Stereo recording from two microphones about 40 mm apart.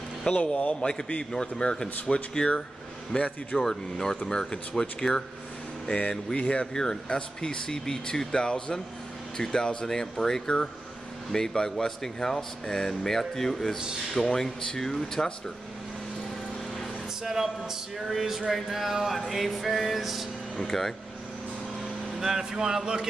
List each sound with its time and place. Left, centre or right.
0.5 s a man's voice: left
3.5 s speech: centre
5.9 s speech: left; by 15.3 s centre
17.2 s a sound: centre
19.1 s speech: centre
20.6 s speech: centre
22.2 s a sound: centre